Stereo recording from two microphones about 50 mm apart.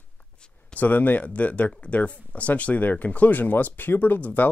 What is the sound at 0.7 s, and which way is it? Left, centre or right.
Speech, left.